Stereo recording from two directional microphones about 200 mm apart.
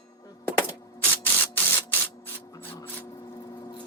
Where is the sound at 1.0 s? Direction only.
10° left (ahead or behind).